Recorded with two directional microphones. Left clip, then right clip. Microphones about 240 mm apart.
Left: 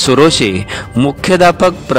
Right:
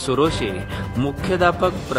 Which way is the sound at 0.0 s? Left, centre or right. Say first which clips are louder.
Left 11 dB; left.